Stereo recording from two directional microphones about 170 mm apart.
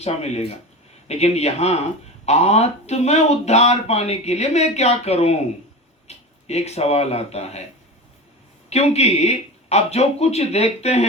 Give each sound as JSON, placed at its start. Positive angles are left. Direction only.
{"t": 0.0, "sound": "speech", "side_deg": 40}
{"t": 8.7, "sound": "speech", "side_deg": 40}